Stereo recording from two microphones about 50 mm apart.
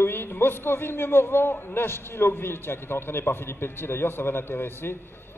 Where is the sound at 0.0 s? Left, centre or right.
Left.